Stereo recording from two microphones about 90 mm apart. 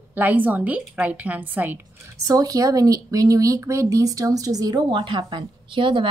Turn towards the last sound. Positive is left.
turn(degrees=-65)  # may be behind; listen again after turning